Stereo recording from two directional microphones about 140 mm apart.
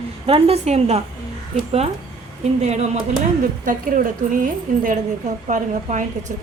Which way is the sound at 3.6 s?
90° right.